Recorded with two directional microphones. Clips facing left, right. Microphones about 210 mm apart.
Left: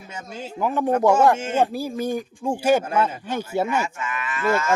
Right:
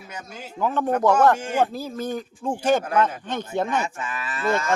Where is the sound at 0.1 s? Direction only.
25° left (ahead or behind).